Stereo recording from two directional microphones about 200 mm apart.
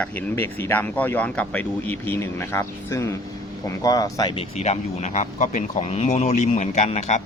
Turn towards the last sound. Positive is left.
turn(degrees=35)  # may be behind; listen again after turning